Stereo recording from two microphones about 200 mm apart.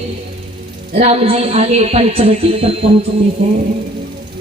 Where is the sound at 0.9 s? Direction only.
30° right (ahead or behind).